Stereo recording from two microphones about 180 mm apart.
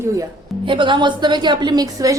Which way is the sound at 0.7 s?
25° right (ahead or behind).